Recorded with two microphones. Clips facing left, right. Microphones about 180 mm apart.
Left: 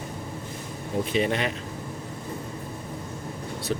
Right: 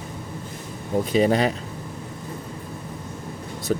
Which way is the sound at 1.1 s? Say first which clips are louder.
Right 7 dB; 40° right (ahead or behind).